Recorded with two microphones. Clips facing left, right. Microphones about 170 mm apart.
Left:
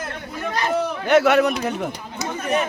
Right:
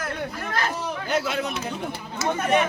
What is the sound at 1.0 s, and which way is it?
Speech, 70° left (ahead or behind).